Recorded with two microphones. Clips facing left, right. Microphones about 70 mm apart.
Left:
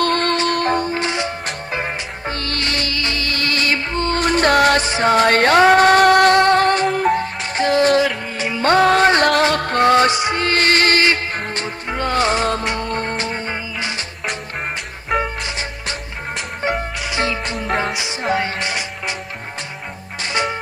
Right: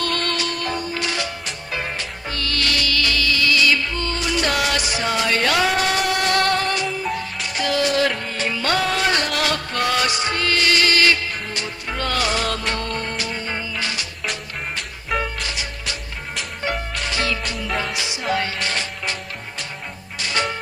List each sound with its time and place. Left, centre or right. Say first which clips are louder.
0.0 s music: left 7 dB; left
6.3 s music: left 6 dB; left
6.6 s music: left 8 dB; left
8.0 s music: left 2 dB; centre
8.5 s music: left 9 dB; left
10.1 s music: left 4 dB; left
10.5 s music: left 3 dB; left
11.9 s music: left 5 dB; left
12.9 s music: left 4 dB; left
13.5 s music: left 2 dB; left
15.1 s music: left 4 dB; left
17.6 s music: left 5 dB; left
18.3 s music: left 2 dB; left
20.2 s music: left 2 dB; left